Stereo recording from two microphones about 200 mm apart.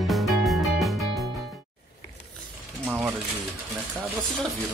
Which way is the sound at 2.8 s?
5° right (ahead or behind).